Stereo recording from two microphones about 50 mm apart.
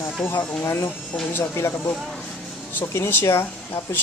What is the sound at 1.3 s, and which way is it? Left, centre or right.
Speech, left.